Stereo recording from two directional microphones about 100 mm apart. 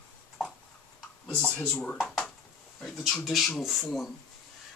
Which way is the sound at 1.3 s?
15° left (ahead or behind).